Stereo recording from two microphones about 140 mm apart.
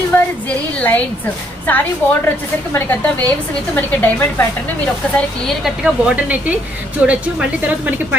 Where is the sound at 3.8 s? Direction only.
15° left (ahead or behind).